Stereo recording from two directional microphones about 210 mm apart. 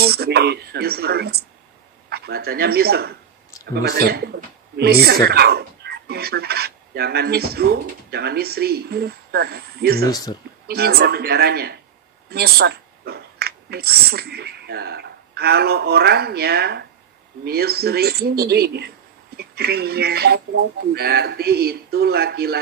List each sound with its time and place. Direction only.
0.0 s fowl: 50° right (ahead or behind)
10.0 s speech: 15° left (ahead or behind)
10.7 s fowl: 50° right (ahead or behind)
12.3 s speech: 50° right (ahead or behind)
17.5 s fowl: 50° right (ahead or behind)